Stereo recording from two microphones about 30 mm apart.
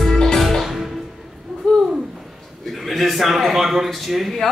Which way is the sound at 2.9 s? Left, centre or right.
Centre.